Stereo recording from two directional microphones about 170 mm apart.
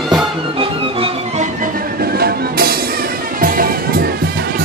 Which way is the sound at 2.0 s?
65° right (ahead or behind).